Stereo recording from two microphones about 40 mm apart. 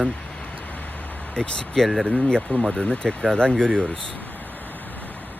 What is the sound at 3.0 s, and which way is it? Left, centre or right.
Speech, left.